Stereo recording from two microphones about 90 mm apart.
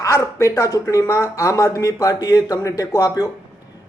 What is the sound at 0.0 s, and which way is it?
A man's voice, 35° left (ahead or behind).